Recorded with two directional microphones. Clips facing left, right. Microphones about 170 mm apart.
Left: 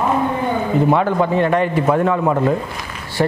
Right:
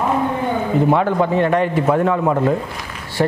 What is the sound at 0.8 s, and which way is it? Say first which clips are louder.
Speech: even; 45° right (ahead or behind).